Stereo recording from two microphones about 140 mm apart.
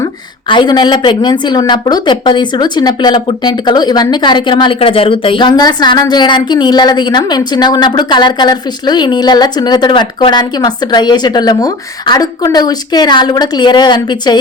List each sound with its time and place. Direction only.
0.0 s a woman's voice: 35° left (ahead or behind)